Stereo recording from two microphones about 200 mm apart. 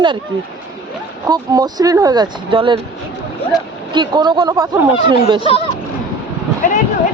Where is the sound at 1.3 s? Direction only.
20° right (ahead or behind).